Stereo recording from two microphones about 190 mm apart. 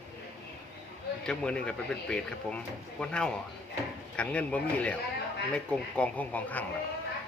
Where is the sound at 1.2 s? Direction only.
5° left (ahead or behind).